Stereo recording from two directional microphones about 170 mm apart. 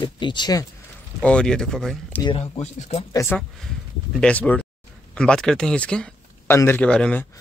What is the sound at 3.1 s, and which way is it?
Speech, 20° left (ahead or behind).